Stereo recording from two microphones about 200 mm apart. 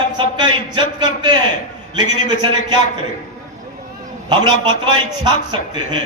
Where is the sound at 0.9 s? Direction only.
20° right (ahead or behind).